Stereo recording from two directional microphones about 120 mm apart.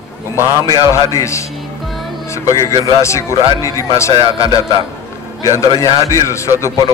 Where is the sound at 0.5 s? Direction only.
30° right (ahead or behind).